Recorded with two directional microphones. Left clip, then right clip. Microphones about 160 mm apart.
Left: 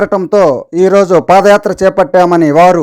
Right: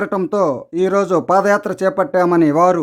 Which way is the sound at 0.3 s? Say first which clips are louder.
Left 9 dB; 15° left (ahead or behind).